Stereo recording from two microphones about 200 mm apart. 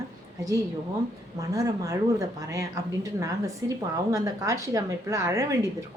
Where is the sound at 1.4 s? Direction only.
15° right (ahead or behind).